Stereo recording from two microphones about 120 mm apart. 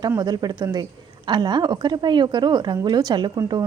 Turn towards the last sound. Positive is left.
turn(degrees=-35)  # may be behind; listen again after turning